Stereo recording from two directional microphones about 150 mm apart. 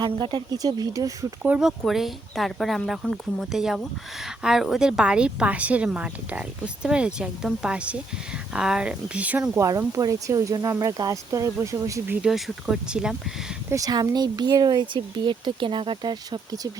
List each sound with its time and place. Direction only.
0.0 s speech: 30° right (ahead or behind)
1.4 s speech: 5° right (ahead or behind)
9.6 s speech: 20° right (ahead or behind); by 13.1 s 5° right (ahead or behind)
13.7 s speech: 25° right (ahead or behind)